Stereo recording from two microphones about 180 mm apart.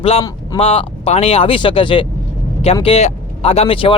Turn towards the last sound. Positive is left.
turn(degrees=30)  # may be behind; listen again after turning